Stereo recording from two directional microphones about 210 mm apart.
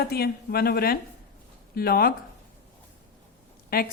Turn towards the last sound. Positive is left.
turn(degrees=45)  # may be behind; listen again after turning